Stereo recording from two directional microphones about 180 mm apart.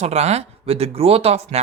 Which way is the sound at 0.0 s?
35° right (ahead or behind).